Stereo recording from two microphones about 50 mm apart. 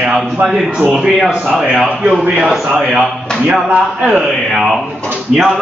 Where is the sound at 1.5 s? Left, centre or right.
Right.